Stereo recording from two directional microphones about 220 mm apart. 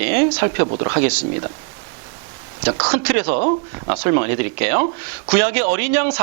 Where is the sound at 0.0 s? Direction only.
15° right (ahead or behind).